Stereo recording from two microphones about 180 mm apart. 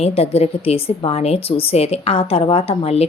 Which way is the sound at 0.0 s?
35° left (ahead or behind).